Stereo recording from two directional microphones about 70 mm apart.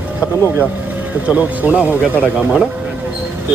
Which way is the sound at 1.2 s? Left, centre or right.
Right.